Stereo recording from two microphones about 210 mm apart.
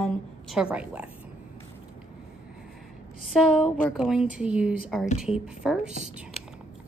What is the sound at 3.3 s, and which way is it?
Speech, centre (ahead or behind).